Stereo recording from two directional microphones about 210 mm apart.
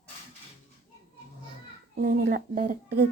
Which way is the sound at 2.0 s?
40° right (ahead or behind).